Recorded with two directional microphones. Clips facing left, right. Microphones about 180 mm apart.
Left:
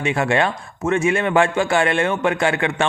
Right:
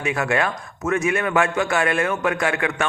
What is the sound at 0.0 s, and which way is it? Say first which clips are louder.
A man's voice: left 3 dB; 25° left (ahead or behind).